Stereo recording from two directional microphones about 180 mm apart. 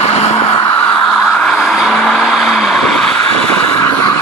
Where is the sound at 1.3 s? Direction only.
Centre (ahead or behind).